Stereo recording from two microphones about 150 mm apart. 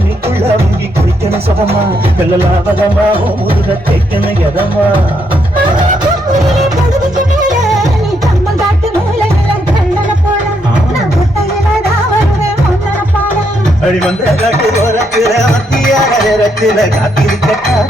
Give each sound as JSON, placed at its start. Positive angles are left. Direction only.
{"t": 7.6, "sound": "music", "side_deg": 0}
{"t": 14.5, "sound": "music", "side_deg": -20}
{"t": 15.1, "sound": "music", "side_deg": 0}